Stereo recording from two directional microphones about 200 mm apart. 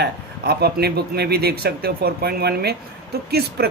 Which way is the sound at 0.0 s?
50° right (ahead or behind).